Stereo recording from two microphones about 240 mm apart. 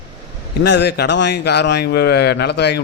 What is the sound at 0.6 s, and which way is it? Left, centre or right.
A man's voice, left.